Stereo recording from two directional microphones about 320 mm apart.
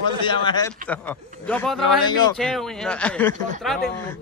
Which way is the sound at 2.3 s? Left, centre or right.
Centre.